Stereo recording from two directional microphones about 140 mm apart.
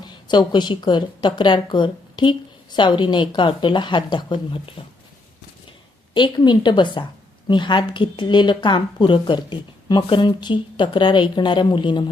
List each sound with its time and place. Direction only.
0.0 s a woman's voice: 30° left (ahead or behind)
6.1 s a woman's voice: 30° left (ahead or behind)